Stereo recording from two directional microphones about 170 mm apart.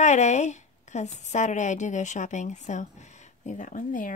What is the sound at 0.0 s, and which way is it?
A woman's voice, 45° left (ahead or behind).